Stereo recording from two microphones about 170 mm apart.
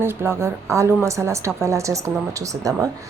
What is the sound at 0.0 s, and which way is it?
A woman's voice, 15° right (ahead or behind).